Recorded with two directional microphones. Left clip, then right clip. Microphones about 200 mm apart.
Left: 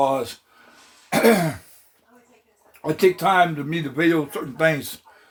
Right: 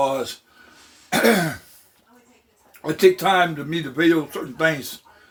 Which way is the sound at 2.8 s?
25° left (ahead or behind).